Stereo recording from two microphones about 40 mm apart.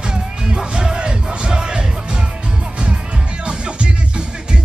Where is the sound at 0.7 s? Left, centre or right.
Right.